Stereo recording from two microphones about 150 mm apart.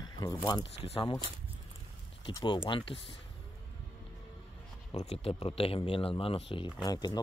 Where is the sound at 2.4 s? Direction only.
35° left (ahead or behind).